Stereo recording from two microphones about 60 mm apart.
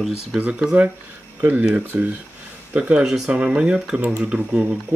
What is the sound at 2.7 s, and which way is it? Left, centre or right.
Speech, centre.